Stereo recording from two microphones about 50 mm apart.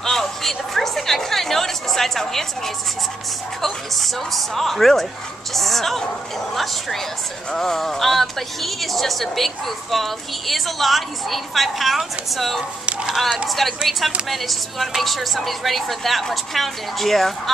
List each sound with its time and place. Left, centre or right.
0.0 s chatter: centre
3.6 s a woman's voice: centre
12.8 s speech: right
13.5 s a woman's voice: centre